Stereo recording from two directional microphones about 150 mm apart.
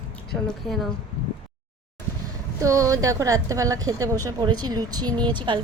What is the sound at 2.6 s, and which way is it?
A woman's voice, 20° right (ahead or behind).